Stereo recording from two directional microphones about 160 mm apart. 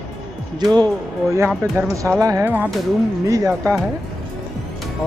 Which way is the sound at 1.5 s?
15° right (ahead or behind).